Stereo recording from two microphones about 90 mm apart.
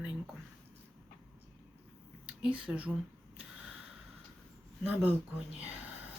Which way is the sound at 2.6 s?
15° right (ahead or behind).